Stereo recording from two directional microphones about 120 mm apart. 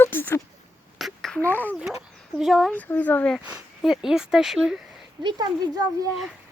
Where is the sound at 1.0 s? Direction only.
Centre (ahead or behind).